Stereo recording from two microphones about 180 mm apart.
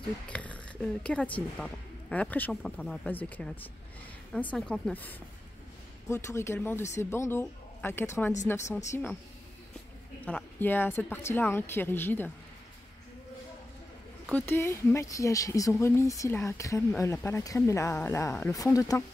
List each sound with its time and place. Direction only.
0.3 s a sound: 5° left (ahead or behind)
1.0 s speech: 5° left (ahead or behind)
10.2 s speech: 10° left (ahead or behind)
14.3 s speech: 10° left (ahead or behind)